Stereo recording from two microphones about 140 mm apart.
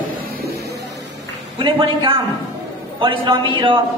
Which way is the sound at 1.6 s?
35° right (ahead or behind).